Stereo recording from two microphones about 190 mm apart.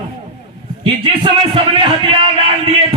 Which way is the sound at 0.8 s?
25° right (ahead or behind).